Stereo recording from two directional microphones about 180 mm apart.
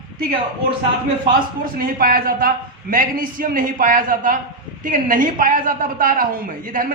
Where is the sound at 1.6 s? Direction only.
50° right (ahead or behind).